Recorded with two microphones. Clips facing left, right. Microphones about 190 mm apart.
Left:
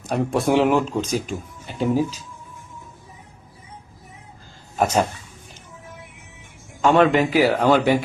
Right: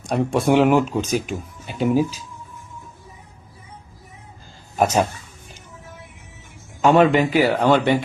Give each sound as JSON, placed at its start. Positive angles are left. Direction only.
{"t": 0.0, "sound": "speech", "side_deg": 0}
{"t": 6.8, "sound": "speech", "side_deg": 0}